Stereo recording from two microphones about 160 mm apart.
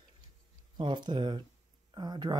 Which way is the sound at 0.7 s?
30° right (ahead or behind).